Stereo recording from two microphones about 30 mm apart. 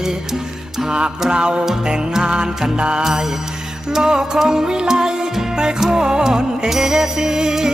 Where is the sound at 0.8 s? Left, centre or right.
Right.